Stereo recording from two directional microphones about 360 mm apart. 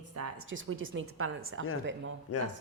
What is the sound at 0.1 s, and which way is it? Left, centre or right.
A woman's voice, right.